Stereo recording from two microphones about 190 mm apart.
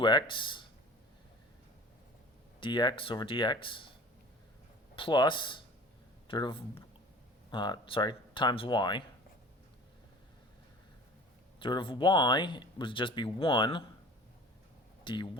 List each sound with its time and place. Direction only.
0.0 s speech: 25° left (ahead or behind)
2.6 s speech: 25° left (ahead or behind)
4.9 s speech: 25° left (ahead or behind)
11.6 s speech: 25° left (ahead or behind)
15.0 s speech: 25° left (ahead or behind)